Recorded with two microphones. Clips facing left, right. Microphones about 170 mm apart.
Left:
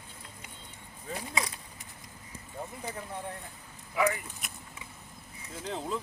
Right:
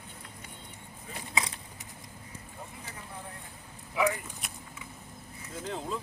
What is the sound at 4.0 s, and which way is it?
Vehicle, centre (ahead or behind).